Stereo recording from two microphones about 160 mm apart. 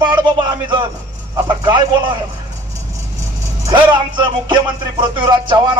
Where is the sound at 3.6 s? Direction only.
30° right (ahead or behind).